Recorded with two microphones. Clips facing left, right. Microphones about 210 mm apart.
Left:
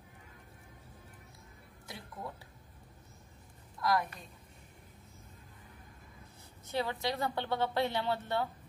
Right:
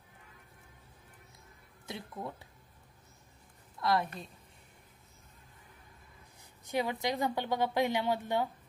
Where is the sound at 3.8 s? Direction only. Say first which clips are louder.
Right 1 dB; 25° right (ahead or behind).